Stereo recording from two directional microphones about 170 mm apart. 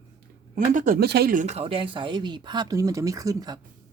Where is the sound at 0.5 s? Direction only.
50° right (ahead or behind).